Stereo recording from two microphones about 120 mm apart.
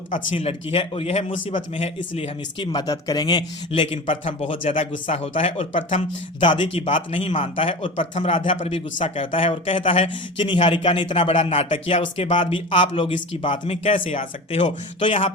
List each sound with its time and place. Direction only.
0.3 s a man's voice: 50° left (ahead or behind)
2.7 s a man's voice: 30° left (ahead or behind); by 5.6 s 55° left (ahead or behind)
6.4 s a man's voice: 45° left (ahead or behind)
7.9 s speech: 90° left
8.3 s a man's voice: 50° left (ahead or behind)
13.8 s a man's voice: 65° left (ahead or behind); by 15.3 s 50° left (ahead or behind)